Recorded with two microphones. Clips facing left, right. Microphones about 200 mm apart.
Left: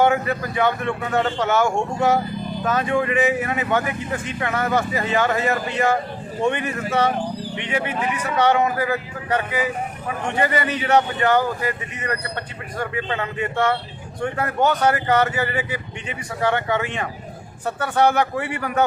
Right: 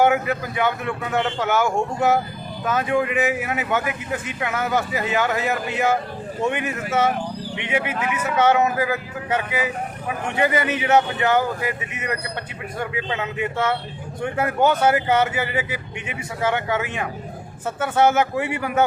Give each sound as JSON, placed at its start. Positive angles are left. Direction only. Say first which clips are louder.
{"t": 0.0, "sound": "speech", "louder": "even", "side_deg": -5}
{"t": 8.1, "sound": "speech", "louder": "right 1 dB", "side_deg": -5}